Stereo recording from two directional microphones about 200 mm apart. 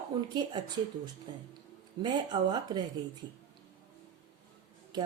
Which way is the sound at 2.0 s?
20° right (ahead or behind).